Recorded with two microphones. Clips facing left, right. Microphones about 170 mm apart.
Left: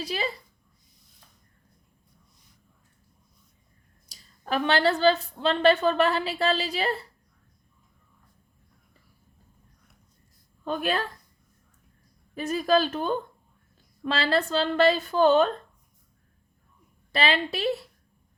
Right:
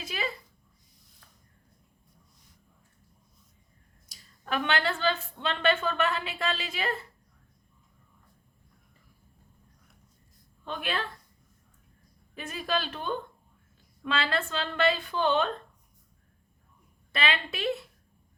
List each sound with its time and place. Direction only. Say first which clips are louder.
0.0 s speech: left 5 dB; 35° left (ahead or behind)
4.1 s a woman's voice: left 4 dB; 35° left (ahead or behind)
10.6 s a woman's voice: left 6 dB; 40° left (ahead or behind)
12.3 s a woman's voice: left 9 dB; 40° left (ahead or behind)
17.1 s a woman's voice: left 5 dB; 35° left (ahead or behind)